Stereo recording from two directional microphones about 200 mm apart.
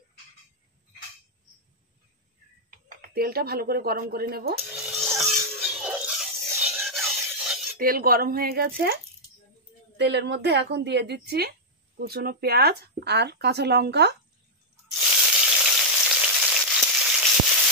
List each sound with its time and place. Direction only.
3.0 s speech: 50° right (ahead or behind)
4.7 s rub: centre (ahead or behind)
5.8 s a sound: 5° right (ahead or behind)
7.8 s speech: 45° right (ahead or behind)
15.0 s frying: 5° right (ahead or behind)